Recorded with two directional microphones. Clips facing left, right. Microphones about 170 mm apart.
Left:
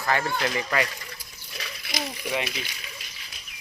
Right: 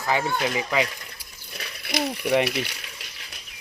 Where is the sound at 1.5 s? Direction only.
55° right (ahead or behind).